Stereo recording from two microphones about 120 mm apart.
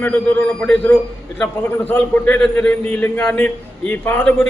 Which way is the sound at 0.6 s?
10° left (ahead or behind).